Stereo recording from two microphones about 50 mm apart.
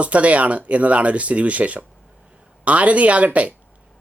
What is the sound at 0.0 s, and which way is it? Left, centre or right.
Speech, right.